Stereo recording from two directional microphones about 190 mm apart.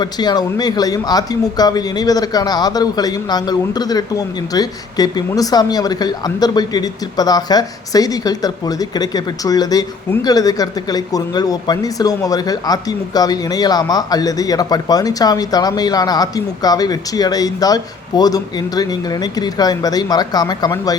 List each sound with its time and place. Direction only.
0.0 s a man's voice: 20° left (ahead or behind)